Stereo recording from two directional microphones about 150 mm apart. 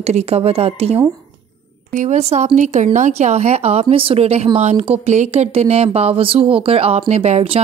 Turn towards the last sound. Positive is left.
turn(degrees=-45)  # may be behind; listen again after turning